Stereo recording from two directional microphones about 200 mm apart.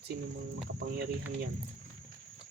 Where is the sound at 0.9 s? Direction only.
45° right (ahead or behind).